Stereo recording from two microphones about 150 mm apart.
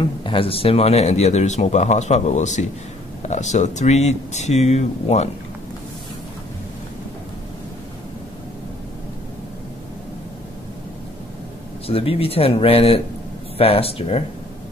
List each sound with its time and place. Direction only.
0.0 s speech: 35° left (ahead or behind)
11.9 s speech: 40° left (ahead or behind)